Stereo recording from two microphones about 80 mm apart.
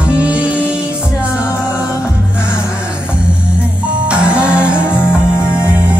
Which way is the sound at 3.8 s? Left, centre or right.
Centre.